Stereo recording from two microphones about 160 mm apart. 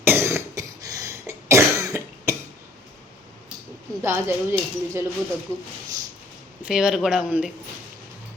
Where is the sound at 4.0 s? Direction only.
15° right (ahead or behind).